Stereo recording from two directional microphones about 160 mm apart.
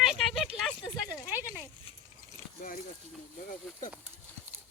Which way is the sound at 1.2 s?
10° right (ahead or behind).